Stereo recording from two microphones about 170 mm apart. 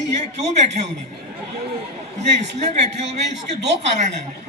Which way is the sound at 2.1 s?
40° right (ahead or behind).